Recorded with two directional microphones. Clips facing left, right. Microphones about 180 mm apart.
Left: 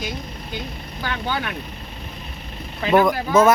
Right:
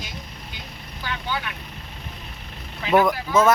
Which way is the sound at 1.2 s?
75° left (ahead or behind).